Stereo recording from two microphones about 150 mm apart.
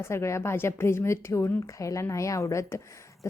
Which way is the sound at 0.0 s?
15° left (ahead or behind).